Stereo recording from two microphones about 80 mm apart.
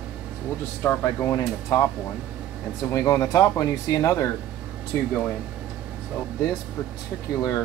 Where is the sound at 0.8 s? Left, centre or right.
Left.